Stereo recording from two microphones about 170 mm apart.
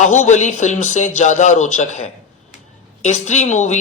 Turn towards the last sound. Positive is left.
turn(degrees=45)  # may be behind; listen again after turning